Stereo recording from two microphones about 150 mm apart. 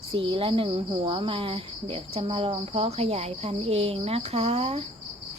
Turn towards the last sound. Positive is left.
turn(degrees=-40)  # may be behind; listen again after turning